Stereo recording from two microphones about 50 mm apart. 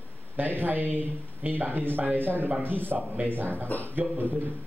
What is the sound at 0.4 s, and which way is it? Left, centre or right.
Speech, right.